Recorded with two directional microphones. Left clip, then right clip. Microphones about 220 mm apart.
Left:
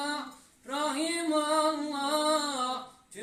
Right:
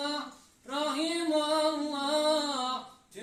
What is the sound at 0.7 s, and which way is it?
Music, 10° left (ahead or behind).